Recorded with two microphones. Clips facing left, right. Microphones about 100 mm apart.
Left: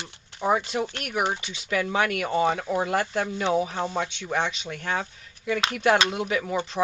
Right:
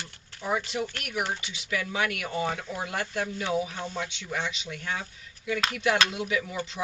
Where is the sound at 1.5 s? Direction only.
40° left (ahead or behind).